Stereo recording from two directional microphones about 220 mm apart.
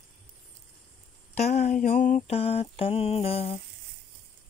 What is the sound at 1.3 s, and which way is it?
Mantra, 30° left (ahead or behind).